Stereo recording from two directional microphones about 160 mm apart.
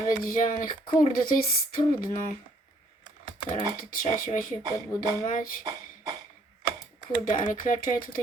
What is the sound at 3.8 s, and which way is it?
Speech, 60° left (ahead or behind).